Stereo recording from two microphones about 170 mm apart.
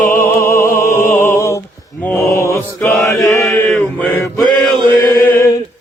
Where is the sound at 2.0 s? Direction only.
15° left (ahead or behind).